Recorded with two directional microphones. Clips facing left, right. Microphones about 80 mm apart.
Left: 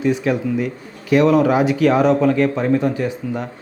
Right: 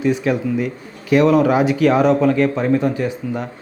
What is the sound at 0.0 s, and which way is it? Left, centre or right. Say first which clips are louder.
Speech: even; right.